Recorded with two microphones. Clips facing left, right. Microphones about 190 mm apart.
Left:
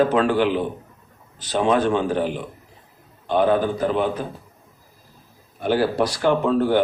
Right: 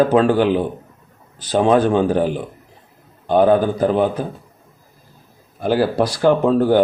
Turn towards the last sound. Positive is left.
turn(degrees=-40)  # may be behind; listen again after turning